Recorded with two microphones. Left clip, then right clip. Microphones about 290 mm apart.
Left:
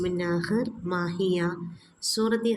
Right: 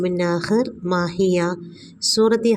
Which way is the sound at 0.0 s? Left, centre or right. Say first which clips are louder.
Right 7 dB; right.